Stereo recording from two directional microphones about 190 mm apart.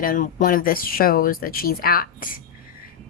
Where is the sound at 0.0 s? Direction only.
45° left (ahead or behind).